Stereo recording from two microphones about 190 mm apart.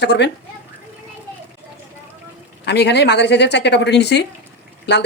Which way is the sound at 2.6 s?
60° left (ahead or behind).